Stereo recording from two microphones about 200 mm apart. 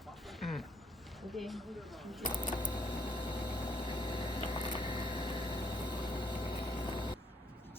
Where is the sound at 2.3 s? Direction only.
20° left (ahead or behind).